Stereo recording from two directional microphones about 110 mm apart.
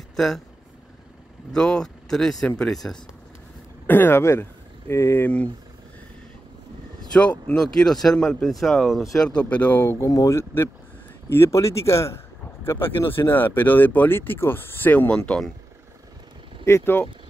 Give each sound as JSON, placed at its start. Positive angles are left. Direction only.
{"t": 0.1, "sound": "speech", "side_deg": 5}
{"t": 1.5, "sound": "speech", "side_deg": 5}
{"t": 3.8, "sound": "speech", "side_deg": 20}
{"t": 7.0, "sound": "speech", "side_deg": 10}
{"t": 16.6, "sound": "speech", "side_deg": 20}